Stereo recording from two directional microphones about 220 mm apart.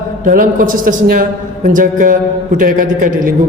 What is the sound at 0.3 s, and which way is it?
Speech, 40° right (ahead or behind).